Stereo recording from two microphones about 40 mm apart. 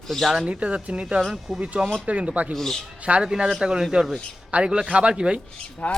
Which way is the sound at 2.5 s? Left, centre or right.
Centre.